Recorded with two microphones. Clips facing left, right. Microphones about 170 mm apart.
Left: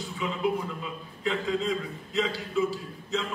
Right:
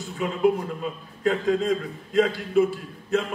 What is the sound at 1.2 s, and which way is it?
A man's voice, 50° right (ahead or behind).